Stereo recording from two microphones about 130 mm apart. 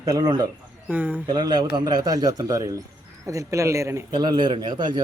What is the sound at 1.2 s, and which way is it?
A man's voice, 35° right (ahead or behind).